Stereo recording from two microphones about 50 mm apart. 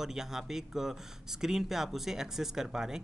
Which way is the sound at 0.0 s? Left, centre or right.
Centre.